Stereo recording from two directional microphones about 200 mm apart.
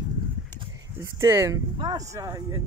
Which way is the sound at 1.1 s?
15° right (ahead or behind).